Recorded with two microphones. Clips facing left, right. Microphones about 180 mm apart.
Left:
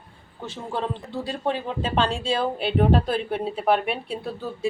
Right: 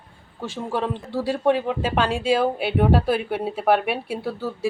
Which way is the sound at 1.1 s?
70° right (ahead or behind).